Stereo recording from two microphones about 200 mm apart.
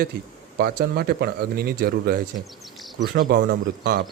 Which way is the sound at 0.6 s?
50° right (ahead or behind).